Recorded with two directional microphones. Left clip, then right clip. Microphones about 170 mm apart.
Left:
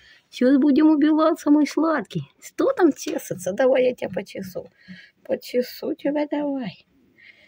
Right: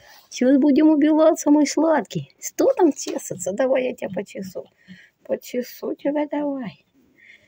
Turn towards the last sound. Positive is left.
turn(degrees=25)  # may be behind; listen again after turning